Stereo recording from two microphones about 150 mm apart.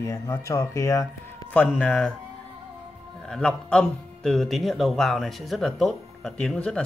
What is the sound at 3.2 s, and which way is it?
A man's voice, 5° left (ahead or behind).